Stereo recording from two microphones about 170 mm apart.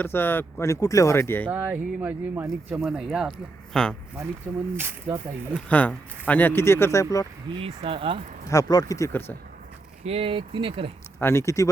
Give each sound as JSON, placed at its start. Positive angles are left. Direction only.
{"t": 0.0, "sound": "speech", "side_deg": 10}
{"t": 1.5, "sound": "speech", "side_deg": -10}
{"t": 2.8, "sound": "speech", "side_deg": 0}
{"t": 4.5, "sound": "speech", "side_deg": -10}
{"t": 5.6, "sound": "speech", "side_deg": 10}
{"t": 7.6, "sound": "speech", "side_deg": -30}
{"t": 8.4, "sound": "speech", "side_deg": 20}
{"t": 10.0, "sound": "speech", "side_deg": -35}
{"t": 11.2, "sound": "speech", "side_deg": 15}